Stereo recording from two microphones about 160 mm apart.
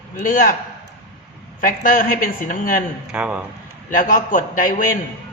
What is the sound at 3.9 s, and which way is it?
Speech, 55° left (ahead or behind).